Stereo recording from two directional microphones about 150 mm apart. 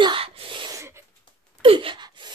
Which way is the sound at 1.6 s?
35° right (ahead or behind).